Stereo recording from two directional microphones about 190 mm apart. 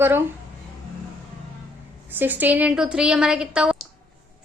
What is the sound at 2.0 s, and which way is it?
A woman's voice, 10° right (ahead or behind).